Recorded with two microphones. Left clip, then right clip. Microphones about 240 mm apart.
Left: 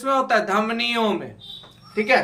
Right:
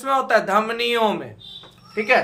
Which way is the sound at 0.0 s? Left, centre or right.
Right.